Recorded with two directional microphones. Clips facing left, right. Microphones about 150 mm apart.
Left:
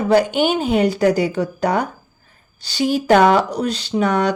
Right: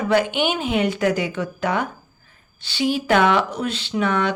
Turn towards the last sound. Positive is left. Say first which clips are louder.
# left 4 dB
turn(degrees=40)  # may be behind; listen again after turning